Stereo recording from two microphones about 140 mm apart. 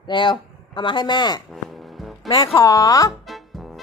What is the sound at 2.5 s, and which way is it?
Speech, 25° left (ahead or behind).